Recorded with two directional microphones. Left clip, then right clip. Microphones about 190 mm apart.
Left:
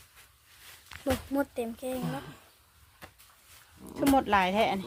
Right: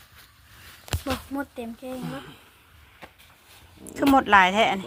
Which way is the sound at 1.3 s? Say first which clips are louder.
Left 2 dB; 30° left (ahead or behind).